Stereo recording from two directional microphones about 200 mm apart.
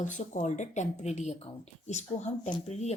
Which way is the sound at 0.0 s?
40° left (ahead or behind).